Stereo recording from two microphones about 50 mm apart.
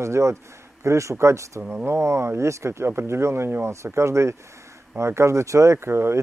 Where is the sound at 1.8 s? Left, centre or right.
Right.